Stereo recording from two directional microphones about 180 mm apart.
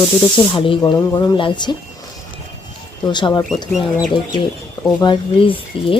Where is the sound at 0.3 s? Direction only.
30° left (ahead or behind).